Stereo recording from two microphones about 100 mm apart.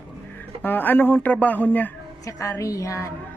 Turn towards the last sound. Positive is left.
turn(degrees=30)  # may be behind; listen again after turning